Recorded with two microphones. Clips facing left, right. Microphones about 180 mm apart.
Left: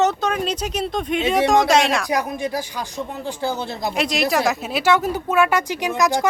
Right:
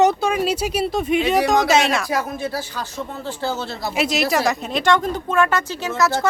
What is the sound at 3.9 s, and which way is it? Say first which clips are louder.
A woman's voice: right 1 dB; 5° right (ahead or behind).